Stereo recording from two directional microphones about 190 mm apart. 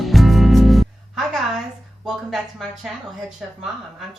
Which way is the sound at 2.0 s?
Centre (ahead or behind).